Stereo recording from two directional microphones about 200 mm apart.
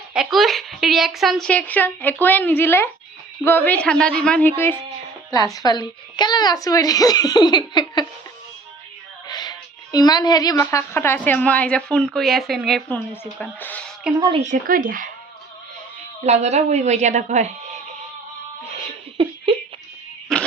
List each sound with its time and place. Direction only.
0.1 s a woman's voice: centre (ahead or behind); by 8.0 s 20° left (ahead or behind)
9.2 s a woman's voice: 20° left (ahead or behind)
14.2 s speech: 25° right (ahead or behind)
14.4 s speech: 40° right (ahead or behind)
16.2 s a woman's voice: 35° right (ahead or behind)
20.3 s music: centre (ahead or behind)